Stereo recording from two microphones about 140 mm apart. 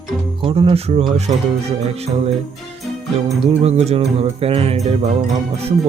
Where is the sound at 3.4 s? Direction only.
50° right (ahead or behind).